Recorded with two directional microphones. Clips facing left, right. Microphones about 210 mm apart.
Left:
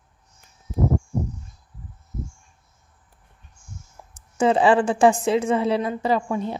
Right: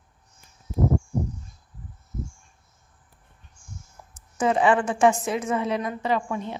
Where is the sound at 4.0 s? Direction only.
25° left (ahead or behind).